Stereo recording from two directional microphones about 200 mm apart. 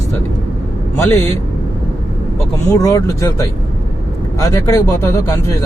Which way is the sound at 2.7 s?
15° left (ahead or behind).